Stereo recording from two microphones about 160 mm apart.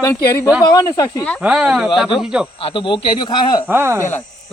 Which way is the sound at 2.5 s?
35° left (ahead or behind).